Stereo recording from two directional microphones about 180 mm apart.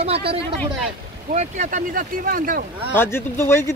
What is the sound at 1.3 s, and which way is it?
Speech, 40° right (ahead or behind).